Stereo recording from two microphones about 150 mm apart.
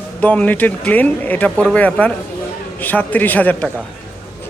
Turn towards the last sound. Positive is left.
turn(degrees=10)  # may be behind; listen again after turning